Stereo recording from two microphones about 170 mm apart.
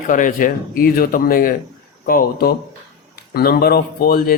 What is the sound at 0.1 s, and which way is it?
Speech, 50° left (ahead or behind).